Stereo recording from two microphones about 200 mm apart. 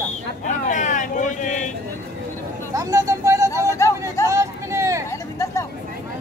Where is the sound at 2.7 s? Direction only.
15° right (ahead or behind).